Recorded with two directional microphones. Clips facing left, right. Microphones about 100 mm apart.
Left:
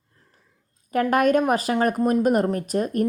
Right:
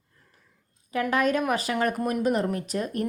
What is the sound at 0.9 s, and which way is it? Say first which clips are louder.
A woman's voice: left 5 dB; 50° left (ahead or behind).